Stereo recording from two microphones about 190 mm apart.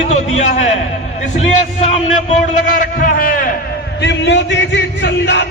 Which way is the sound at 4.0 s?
65° left (ahead or behind).